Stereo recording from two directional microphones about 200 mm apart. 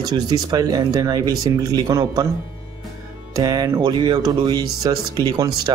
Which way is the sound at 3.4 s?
15° right (ahead or behind).